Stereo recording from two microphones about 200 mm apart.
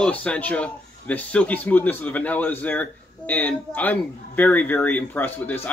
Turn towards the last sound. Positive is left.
turn(degrees=10)  # may be behind; listen again after turning